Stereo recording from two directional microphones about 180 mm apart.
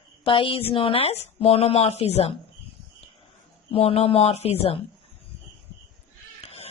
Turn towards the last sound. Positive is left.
turn(degrees=35)  # may be behind; listen again after turning